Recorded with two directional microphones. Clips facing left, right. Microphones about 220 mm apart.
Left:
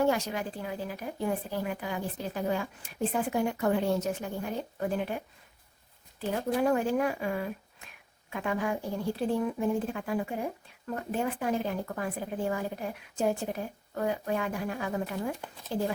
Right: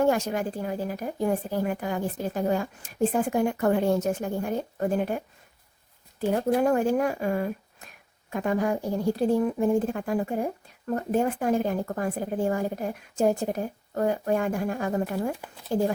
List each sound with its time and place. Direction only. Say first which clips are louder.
0.0 s speech: right 4 dB; 50° right (ahead or behind)